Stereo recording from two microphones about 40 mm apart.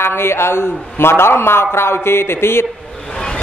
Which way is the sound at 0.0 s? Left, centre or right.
Left.